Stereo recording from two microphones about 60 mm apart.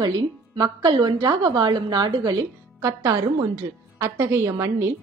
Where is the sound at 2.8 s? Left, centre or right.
Right.